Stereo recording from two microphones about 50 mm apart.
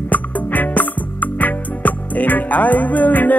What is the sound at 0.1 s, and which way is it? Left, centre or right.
Music, left.